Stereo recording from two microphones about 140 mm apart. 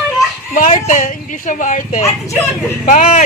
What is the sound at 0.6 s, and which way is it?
Speech, 60° left (ahead or behind).